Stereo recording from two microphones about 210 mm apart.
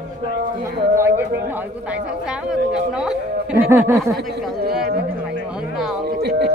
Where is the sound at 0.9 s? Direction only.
10° right (ahead or behind).